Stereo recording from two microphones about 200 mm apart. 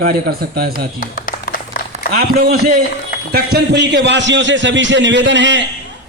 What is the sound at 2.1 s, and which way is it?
A man's voice, 50° right (ahead or behind).